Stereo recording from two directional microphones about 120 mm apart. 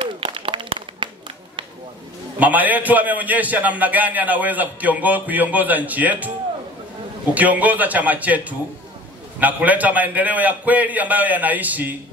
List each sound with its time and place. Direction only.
0.0 s a sound: 45° right (ahead or behind)
2.3 s a man's voice: 15° right (ahead or behind)
7.3 s a man's voice: 15° right (ahead or behind)